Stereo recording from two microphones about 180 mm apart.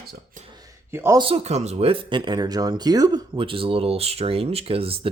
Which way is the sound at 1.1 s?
30° right (ahead or behind).